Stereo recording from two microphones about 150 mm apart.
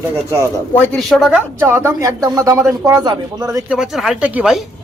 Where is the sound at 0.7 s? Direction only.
15° left (ahead or behind).